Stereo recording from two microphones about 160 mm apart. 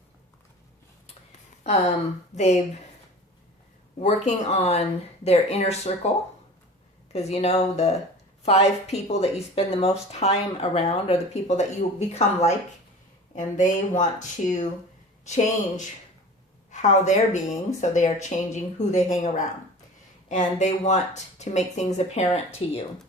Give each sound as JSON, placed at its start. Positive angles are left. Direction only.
{"t": 2.3, "sound": "speech", "side_deg": 45}
{"t": 4.0, "sound": "speech", "side_deg": 45}
{"t": 7.1, "sound": "speech", "side_deg": 40}
{"t": 16.7, "sound": "speech", "side_deg": 50}